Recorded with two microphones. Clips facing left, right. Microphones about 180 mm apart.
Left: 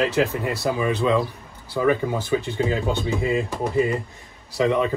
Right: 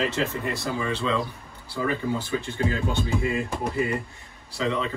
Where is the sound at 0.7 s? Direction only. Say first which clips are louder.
Left 6 dB; 15° left (ahead or behind).